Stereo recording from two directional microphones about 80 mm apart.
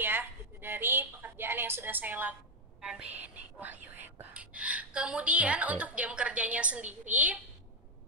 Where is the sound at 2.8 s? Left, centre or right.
Centre.